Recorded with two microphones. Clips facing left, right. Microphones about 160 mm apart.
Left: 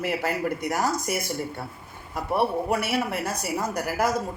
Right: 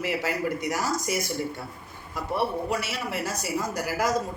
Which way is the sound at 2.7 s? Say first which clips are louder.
Left 4 dB; 55° left (ahead or behind).